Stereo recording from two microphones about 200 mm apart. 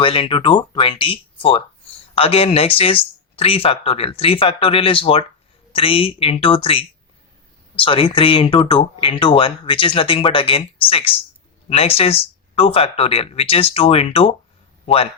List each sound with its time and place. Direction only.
0.0 s speech: 25° left (ahead or behind)